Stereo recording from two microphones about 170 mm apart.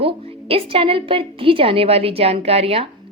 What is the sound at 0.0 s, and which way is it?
A woman's voice, 35° right (ahead or behind).